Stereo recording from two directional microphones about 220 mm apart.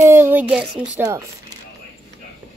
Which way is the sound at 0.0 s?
10° right (ahead or behind).